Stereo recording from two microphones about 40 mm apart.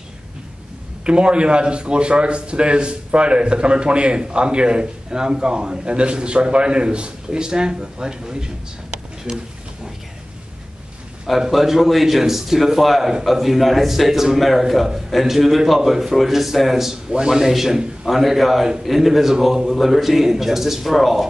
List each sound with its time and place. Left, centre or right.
1.0 s a man's voice: right
11.5 s a man's voice: centre
17.1 s a man's voice: centre